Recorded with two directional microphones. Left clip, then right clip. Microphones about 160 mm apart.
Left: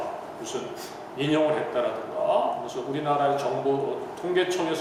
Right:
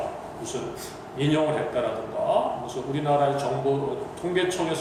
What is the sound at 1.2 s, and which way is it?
Speech, 20° left (ahead or behind).